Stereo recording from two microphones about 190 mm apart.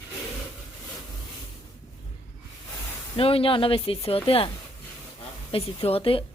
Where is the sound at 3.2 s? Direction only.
30° left (ahead or behind).